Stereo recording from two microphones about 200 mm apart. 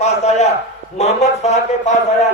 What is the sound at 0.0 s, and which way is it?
A man's voice, 35° left (ahead or behind).